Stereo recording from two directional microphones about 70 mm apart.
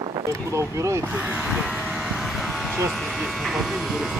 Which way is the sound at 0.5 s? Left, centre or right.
Right.